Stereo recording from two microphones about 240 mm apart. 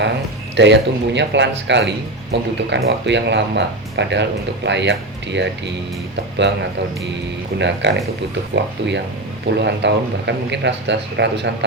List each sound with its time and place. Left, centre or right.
0.5 s speech: right
9.6 s speech: right